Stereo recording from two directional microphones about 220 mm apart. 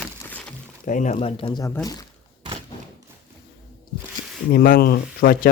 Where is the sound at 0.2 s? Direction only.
5° left (ahead or behind).